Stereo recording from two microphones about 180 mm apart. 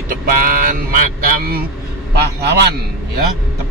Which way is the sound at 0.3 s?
50° right (ahead or behind).